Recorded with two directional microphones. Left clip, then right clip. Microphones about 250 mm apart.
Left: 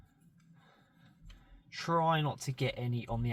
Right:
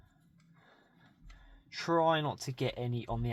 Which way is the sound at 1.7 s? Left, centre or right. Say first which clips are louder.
Right 2 dB; right.